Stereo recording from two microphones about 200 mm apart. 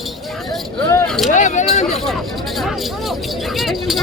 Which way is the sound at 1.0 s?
5° left (ahead or behind).